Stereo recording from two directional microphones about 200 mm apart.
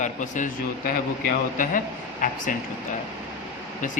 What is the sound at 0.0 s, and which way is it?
Speech, 40° left (ahead or behind).